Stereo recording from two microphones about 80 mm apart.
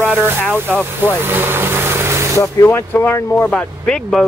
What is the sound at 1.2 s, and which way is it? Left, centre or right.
Vehicle, right.